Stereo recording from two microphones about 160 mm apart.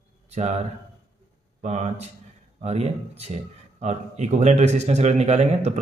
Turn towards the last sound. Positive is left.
turn(degrees=-45)  # may be behind; listen again after turning